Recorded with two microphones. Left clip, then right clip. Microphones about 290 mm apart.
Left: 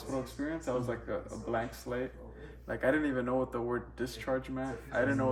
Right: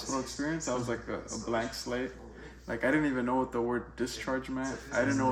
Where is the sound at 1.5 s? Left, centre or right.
Centre.